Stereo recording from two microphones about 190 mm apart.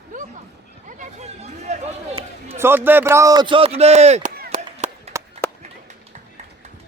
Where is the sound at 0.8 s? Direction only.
40° right (ahead or behind).